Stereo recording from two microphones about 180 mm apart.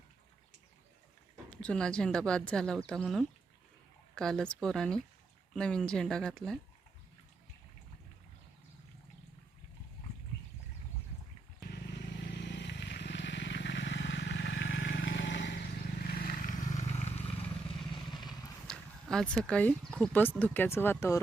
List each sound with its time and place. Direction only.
1.5 s a woman's voice: 5° left (ahead or behind)
11.7 s vehicle: 70° left (ahead or behind)
16.0 s vehicle: 55° left (ahead or behind); by 17.2 s 35° left (ahead or behind)
18.7 s speech: 5° left (ahead or behind)